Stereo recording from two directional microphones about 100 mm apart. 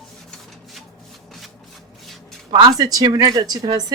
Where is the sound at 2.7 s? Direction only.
35° right (ahead or behind).